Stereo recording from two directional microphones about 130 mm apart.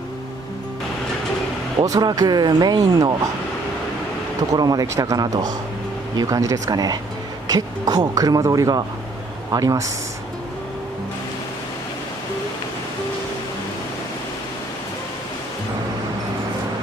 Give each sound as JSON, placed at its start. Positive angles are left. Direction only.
{"t": 1.8, "sound": "speech", "side_deg": -30}
{"t": 4.5, "sound": "speech", "side_deg": -30}